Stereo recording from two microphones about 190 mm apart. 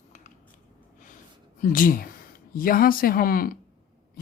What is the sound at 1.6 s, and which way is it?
Speech, 45° left (ahead or behind).